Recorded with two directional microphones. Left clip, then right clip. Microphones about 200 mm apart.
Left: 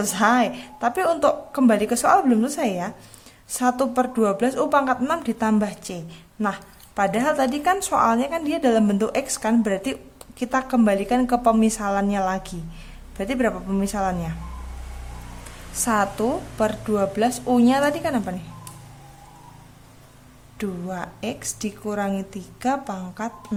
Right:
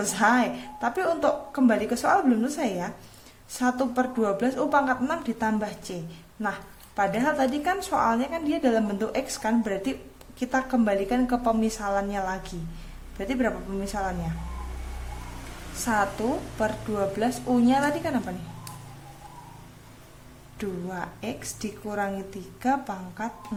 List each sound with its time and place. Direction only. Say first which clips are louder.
0.0 s a woman's voice: left 3 dB; 25° left (ahead or behind)
15.8 s a woman's voice: left 4 dB; 25° left (ahead or behind)
20.6 s a woman's voice: left 3 dB; 25° left (ahead or behind)